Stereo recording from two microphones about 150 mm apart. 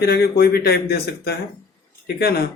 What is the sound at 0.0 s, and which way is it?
Speech, 90° left.